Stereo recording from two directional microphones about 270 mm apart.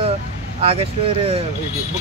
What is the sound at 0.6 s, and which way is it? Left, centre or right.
Speech, right.